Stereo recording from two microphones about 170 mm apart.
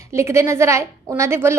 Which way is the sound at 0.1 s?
15° right (ahead or behind).